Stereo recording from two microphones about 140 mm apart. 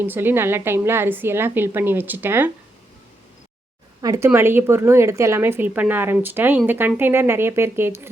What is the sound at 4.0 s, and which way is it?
A woman's voice, 25° right (ahead or behind).